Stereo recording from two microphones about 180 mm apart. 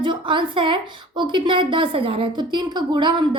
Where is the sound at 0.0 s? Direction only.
25° right (ahead or behind).